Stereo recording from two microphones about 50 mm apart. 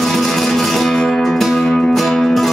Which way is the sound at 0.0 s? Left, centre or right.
Centre.